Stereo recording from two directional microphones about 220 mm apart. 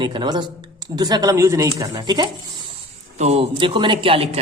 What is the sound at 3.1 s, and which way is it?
A man's voice, 30° right (ahead or behind).